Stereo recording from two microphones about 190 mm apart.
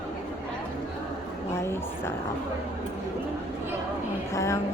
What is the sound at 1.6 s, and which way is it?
Speech, 15° left (ahead or behind).